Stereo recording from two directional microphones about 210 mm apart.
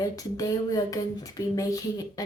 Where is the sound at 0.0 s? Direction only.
15° left (ahead or behind).